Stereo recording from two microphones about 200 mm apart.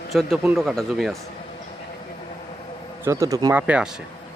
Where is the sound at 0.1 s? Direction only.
Centre (ahead or behind).